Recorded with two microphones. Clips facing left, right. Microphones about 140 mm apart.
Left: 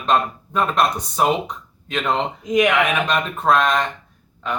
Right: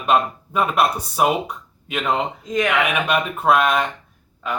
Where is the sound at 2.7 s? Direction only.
10° right (ahead or behind).